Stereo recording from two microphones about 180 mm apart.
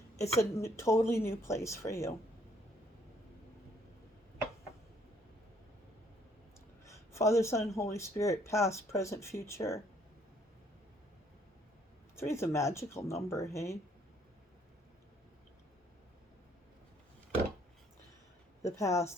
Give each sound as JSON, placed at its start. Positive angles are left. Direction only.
{"t": 0.3, "sound": "speech", "side_deg": 15}
{"t": 6.8, "sound": "speech", "side_deg": 15}
{"t": 12.1, "sound": "speech", "side_deg": 15}
{"t": 18.6, "sound": "speech", "side_deg": 15}